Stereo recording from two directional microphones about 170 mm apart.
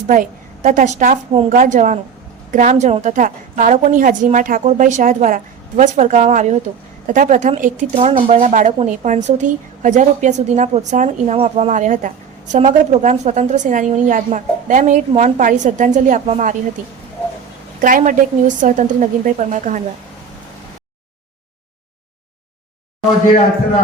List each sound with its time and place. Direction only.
0.1 s a woman's voice: 50° right (ahead or behind)
17.7 s speech: 50° right (ahead or behind)